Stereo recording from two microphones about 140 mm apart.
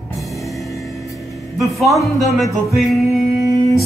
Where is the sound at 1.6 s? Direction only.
Centre (ahead or behind).